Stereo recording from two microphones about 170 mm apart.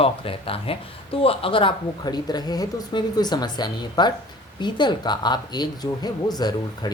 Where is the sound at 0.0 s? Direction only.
35° left (ahead or behind).